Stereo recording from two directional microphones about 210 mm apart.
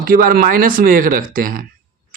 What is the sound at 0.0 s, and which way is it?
Speech, 45° right (ahead or behind).